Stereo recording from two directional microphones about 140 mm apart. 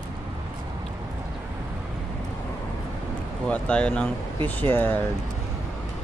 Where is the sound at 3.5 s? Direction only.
10° left (ahead or behind).